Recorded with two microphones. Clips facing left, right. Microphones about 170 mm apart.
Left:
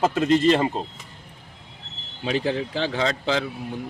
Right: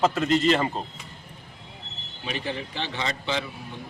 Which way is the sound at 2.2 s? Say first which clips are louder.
Left 7 dB; 90° left.